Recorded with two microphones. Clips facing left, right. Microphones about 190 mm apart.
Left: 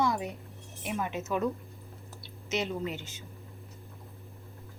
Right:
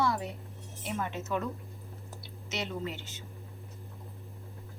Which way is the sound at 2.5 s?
15° left (ahead or behind).